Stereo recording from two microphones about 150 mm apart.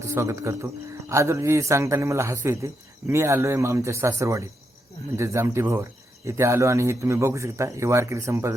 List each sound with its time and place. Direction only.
0.0 s a man's voice: 20° right (ahead or behind)